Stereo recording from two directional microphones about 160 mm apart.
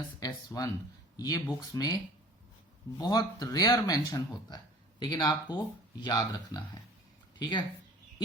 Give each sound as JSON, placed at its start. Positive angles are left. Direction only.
{"t": 0.2, "sound": "speech", "side_deg": 25}
{"t": 3.0, "sound": "speech", "side_deg": 25}